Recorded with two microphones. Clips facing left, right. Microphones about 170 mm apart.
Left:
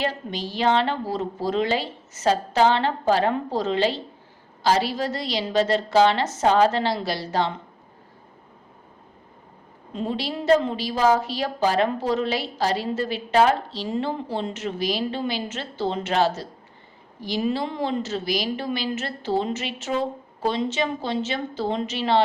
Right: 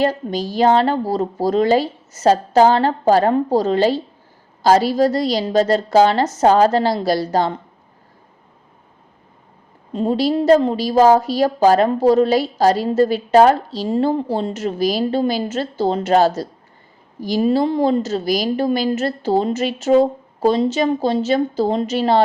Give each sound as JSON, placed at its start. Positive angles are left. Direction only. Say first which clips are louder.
{"t": 0.0, "sound": "a woman's voice", "louder": "right 8 dB", "side_deg": -40}
{"t": 9.9, "sound": "a woman's voice", "louder": "right 10 dB", "side_deg": -40}